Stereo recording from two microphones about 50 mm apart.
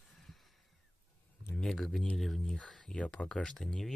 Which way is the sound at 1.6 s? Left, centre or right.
Centre.